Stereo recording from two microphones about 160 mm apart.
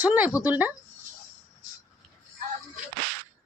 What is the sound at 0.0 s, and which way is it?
Speech, 10° right (ahead or behind).